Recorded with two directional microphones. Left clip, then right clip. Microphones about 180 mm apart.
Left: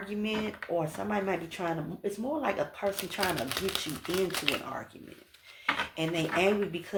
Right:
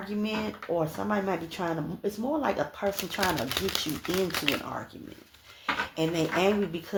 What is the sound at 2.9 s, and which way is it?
Speech, 10° right (ahead or behind).